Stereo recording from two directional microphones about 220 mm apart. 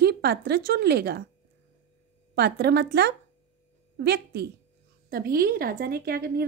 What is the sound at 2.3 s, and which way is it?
Speech, 50° right (ahead or behind).